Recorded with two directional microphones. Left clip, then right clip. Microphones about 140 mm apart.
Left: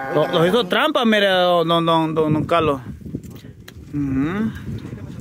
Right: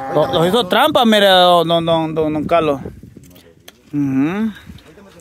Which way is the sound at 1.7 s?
5° right (ahead or behind).